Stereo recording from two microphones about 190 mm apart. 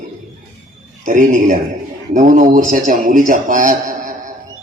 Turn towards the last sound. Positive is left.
turn(degrees=-45)  # may be behind; listen again after turning